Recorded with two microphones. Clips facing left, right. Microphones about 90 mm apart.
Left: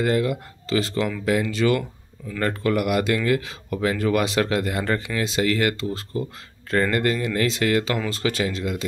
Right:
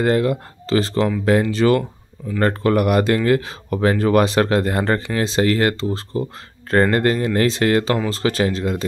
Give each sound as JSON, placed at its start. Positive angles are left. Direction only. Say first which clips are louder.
{"t": 0.0, "sound": "speech", "louder": "right 4 dB", "side_deg": -40}